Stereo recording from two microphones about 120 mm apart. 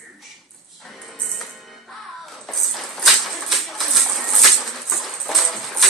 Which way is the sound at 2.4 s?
Centre (ahead or behind).